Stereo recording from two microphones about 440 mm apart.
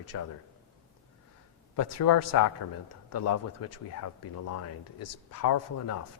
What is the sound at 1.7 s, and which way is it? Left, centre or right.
Speech, left.